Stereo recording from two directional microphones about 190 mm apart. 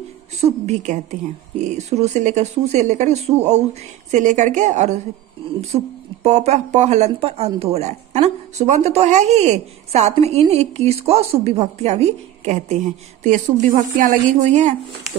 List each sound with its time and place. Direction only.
0.4 s speech: 35° right (ahead or behind)
6.2 s speech: 35° right (ahead or behind)